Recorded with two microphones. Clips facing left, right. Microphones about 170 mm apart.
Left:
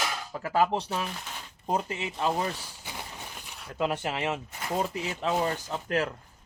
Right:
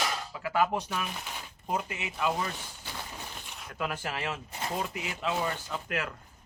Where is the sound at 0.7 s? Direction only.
30° left (ahead or behind).